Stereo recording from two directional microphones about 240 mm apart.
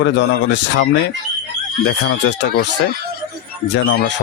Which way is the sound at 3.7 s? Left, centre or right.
Left.